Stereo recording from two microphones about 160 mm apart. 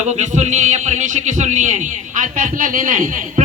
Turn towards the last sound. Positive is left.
turn(degrees=-55)  # may be behind; listen again after turning